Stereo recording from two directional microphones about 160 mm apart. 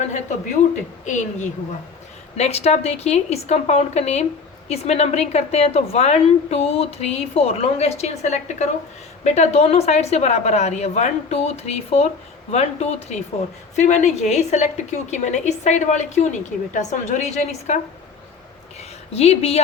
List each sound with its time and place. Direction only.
1.0 s a woman's voice: 50° left (ahead or behind)
18.8 s speech: 40° left (ahead or behind)